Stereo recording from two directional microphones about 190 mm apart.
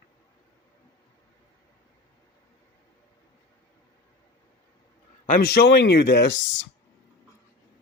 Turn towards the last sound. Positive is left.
turn(degrees=70)  # may be behind; listen again after turning